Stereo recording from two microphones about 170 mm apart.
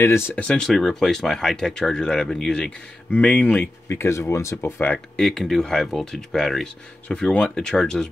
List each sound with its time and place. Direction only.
0.0 s speech: 15° left (ahead or behind)
0.5 s speech: centre (ahead or behind)